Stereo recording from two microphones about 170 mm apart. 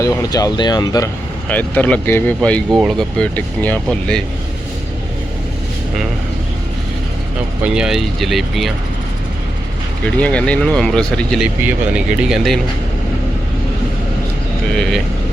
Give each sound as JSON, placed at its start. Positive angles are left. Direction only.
{"t": 0.0, "sound": "speech", "side_deg": 20}
{"t": 1.5, "sound": "speech", "side_deg": 10}
{"t": 7.6, "sound": "speech", "side_deg": -5}
{"t": 10.2, "sound": "speech", "side_deg": 5}
{"t": 14.8, "sound": "speech", "side_deg": 0}